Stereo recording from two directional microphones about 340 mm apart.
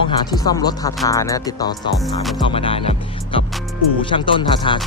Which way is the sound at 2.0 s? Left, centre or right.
Centre.